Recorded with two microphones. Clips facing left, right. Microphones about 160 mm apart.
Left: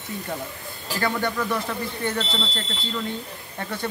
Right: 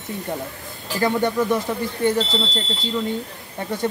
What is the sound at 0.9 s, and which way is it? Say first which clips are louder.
Speech: right 5 dB; 20° right (ahead or behind).